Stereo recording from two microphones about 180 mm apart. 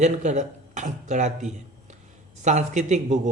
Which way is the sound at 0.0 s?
40° right (ahead or behind).